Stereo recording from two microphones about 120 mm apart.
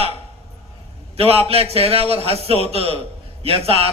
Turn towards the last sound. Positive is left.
turn(degrees=-55)  # may be behind; listen again after turning